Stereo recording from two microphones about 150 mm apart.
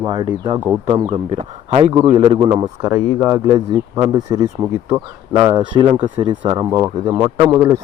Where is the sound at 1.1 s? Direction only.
45° right (ahead or behind).